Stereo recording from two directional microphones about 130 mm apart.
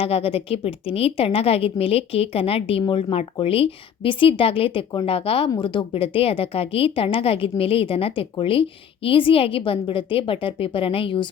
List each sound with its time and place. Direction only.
0.0 s a woman's voice: 50° left (ahead or behind)